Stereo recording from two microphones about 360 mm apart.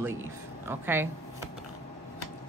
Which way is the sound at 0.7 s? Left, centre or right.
Centre.